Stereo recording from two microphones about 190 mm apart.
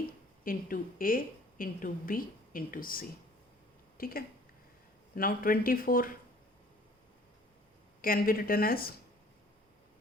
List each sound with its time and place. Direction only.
0.4 s a woman's voice: 45° left (ahead or behind)
8.0 s a woman's voice: 50° left (ahead or behind)